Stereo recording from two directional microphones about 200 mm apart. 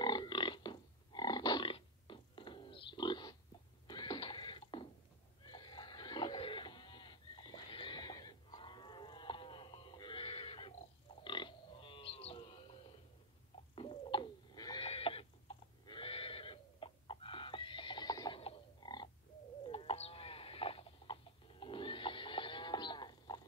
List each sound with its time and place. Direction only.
0.0 s a sound: 20° left (ahead or behind)
3.8 s mechanisms: 20° left (ahead or behind)
5.5 s pig: 20° left (ahead or behind)
11.2 s livestock: 25° left (ahead or behind)
13.7 s a sound: 25° left (ahead or behind)
19.6 s sheep: 25° left (ahead or behind)